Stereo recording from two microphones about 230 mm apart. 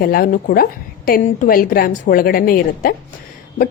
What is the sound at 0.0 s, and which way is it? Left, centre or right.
A woman's voice, left.